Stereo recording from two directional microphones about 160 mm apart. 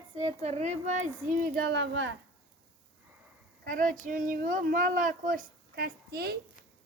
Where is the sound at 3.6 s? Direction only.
60° right (ahead or behind); by 6.3 s 80° right.